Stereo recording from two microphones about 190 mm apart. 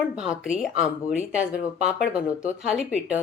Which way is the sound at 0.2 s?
5° right (ahead or behind).